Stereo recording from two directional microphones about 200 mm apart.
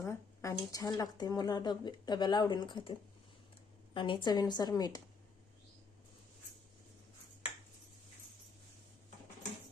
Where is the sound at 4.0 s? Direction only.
25° left (ahead or behind).